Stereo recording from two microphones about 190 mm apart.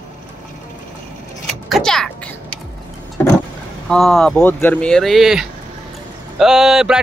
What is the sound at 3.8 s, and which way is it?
Speech, centre (ahead or behind).